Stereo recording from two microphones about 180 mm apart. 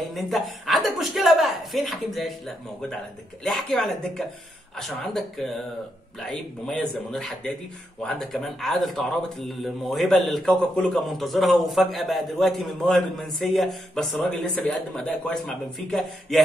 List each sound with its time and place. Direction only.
0.1 s a man's voice: centre (ahead or behind)